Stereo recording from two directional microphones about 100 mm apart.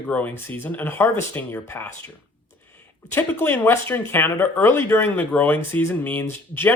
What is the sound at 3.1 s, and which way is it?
Speech, 25° left (ahead or behind).